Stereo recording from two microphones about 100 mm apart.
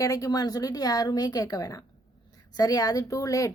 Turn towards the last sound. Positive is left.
turn(degrees=35)  # may be behind; listen again after turning